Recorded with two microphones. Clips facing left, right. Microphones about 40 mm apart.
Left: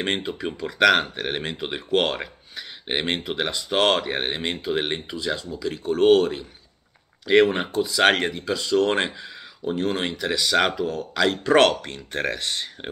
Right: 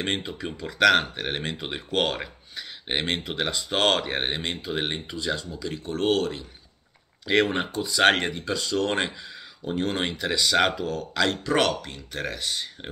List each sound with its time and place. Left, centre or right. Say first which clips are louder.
0.0 s speech: left 3 dB; centre
7.2 s speech: left 5 dB; centre
11.8 s speech: left 5 dB; left